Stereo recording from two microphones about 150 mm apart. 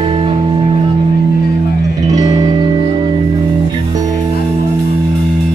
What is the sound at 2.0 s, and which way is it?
Music, 25° right (ahead or behind).